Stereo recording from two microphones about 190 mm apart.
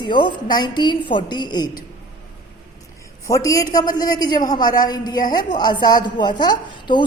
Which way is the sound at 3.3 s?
15° left (ahead or behind).